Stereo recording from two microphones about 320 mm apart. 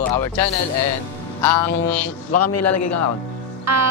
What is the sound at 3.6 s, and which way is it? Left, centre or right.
Music, right.